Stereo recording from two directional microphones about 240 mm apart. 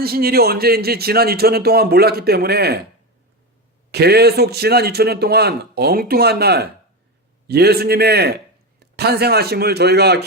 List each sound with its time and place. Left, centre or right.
0.0 s a man's voice: right
3.9 s a man's voice: right